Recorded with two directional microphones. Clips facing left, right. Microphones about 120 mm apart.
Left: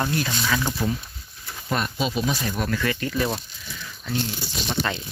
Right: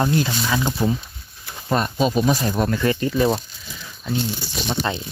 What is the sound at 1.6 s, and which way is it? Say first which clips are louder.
Speech: right 6 dB; 35° right (ahead or behind).